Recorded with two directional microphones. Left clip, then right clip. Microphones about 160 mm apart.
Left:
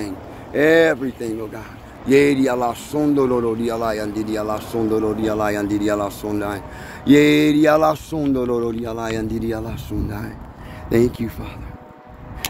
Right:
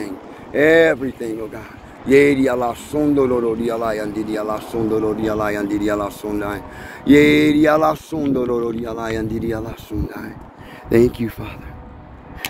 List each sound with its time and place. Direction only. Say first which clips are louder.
0.0 s a sound: even; 45° left (ahead or behind)
2.0 s a man's voice: right 2 dB; 40° left (ahead or behind)
10.9 s speech: right 3 dB; 5° left (ahead or behind)